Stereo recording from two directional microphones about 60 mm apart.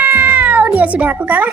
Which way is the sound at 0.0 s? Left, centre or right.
Right.